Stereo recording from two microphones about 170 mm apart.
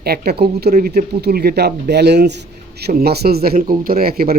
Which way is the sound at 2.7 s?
70° right (ahead or behind).